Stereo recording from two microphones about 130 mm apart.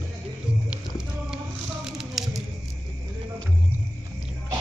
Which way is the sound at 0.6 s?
5° right (ahead or behind).